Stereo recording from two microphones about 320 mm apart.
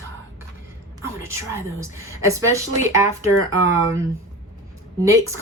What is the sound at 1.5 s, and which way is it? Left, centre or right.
Speech, centre.